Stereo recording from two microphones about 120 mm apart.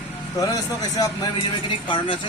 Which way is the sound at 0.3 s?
30° left (ahead or behind).